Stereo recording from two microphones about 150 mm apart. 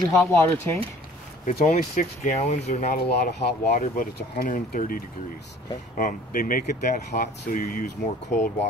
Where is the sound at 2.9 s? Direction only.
90° left; by 8.5 s 60° left (ahead or behind).